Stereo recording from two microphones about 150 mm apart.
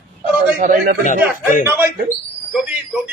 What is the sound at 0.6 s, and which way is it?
Speech, 70° right (ahead or behind).